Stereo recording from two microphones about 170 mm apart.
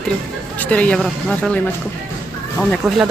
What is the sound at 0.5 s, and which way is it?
Speech, 10° left (ahead or behind).